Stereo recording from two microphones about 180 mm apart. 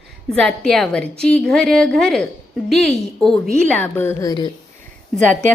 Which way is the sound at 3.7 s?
10° left (ahead or behind).